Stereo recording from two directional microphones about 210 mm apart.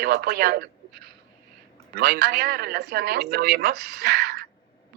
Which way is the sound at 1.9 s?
50° right (ahead or behind).